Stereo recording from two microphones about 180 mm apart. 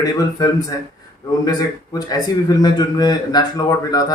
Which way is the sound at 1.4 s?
20° left (ahead or behind).